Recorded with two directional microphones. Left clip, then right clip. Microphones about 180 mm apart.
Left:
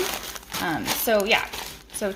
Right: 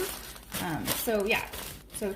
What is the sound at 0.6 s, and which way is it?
Speech, 30° left (ahead or behind).